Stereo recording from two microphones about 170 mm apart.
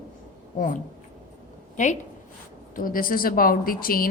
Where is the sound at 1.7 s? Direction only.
45° left (ahead or behind).